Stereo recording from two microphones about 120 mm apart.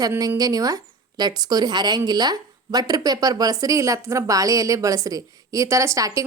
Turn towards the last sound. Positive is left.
turn(degrees=-30)  # may be behind; listen again after turning